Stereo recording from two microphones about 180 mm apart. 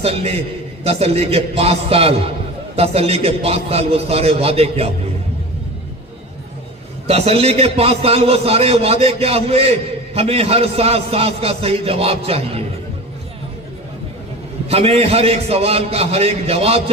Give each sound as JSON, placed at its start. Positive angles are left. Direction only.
{"t": 0.0, "sound": "a man's voice", "side_deg": -35}
{"t": 7.1, "sound": "a man's voice", "side_deg": -35}
{"t": 14.7, "sound": "a man's voice", "side_deg": -35}